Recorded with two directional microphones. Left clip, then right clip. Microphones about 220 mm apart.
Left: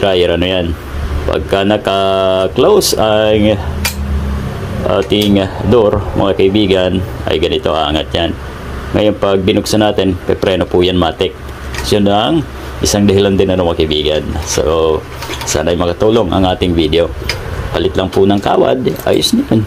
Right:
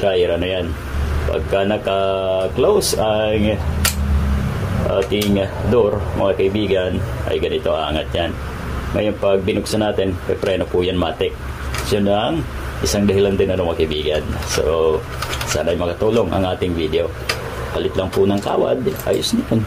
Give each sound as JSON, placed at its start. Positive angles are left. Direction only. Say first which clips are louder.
{"t": 0.0, "sound": "speech", "louder": "left 5 dB", "side_deg": 40}
{"t": 5.1, "sound": "speech", "louder": "left 6 dB", "side_deg": 35}